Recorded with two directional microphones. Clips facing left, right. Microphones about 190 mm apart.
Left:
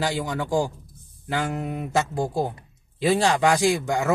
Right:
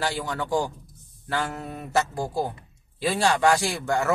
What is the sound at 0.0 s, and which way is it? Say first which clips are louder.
A man's voice: left 2 dB; 15° left (ahead or behind).